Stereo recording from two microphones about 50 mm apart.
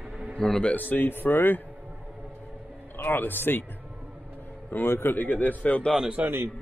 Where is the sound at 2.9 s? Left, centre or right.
Left.